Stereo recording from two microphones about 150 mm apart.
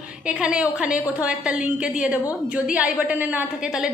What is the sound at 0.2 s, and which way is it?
A woman's voice, 5° right (ahead or behind).